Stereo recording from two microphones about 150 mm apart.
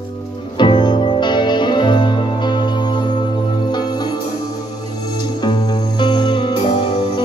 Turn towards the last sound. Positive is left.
turn(degrees=30)  # may be behind; listen again after turning